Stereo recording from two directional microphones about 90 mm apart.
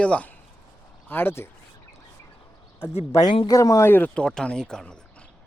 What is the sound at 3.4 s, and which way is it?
Speech, 40° left (ahead or behind).